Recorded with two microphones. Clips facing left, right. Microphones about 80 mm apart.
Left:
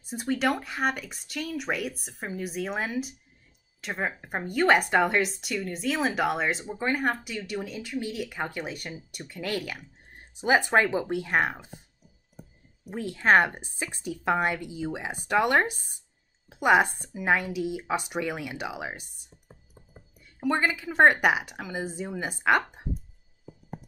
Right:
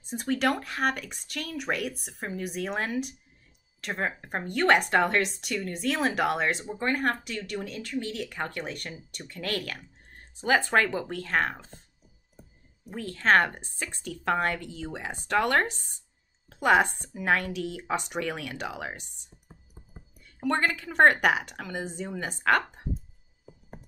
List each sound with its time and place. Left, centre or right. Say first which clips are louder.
0.0 s speech: even; centre
12.9 s speech: left 1 dB; centre